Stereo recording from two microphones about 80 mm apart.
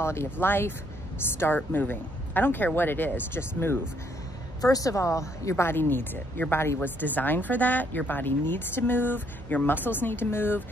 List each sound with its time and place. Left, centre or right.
0.0 s speech: left
4.6 s speech: left